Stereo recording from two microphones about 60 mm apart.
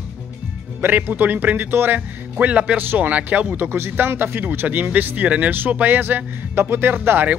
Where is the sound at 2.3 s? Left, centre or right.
Right.